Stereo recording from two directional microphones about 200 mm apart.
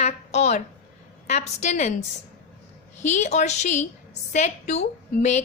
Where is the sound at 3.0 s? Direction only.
35° left (ahead or behind).